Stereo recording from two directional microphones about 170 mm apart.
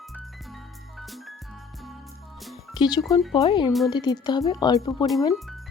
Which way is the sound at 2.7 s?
25° left (ahead or behind).